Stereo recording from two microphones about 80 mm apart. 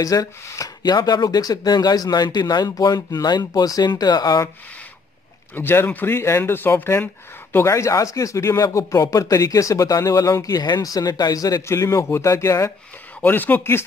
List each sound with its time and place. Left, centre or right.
0.0 s speech: left
5.5 s speech: left
13.2 s speech: left